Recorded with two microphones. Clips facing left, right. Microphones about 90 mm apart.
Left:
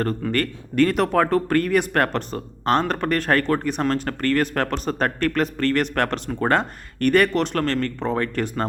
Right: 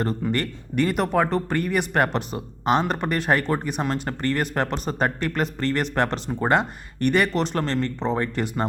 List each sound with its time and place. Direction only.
0.0 s speech: 15° right (ahead or behind)
0.9 s speech: 5° right (ahead or behind)
8.4 s speech: 5° right (ahead or behind)